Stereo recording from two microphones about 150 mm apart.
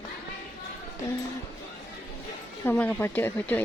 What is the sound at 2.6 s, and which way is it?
Speech, 10° left (ahead or behind).